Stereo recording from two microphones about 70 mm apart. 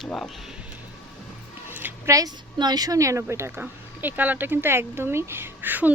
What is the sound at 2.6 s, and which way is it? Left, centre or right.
Speech, right.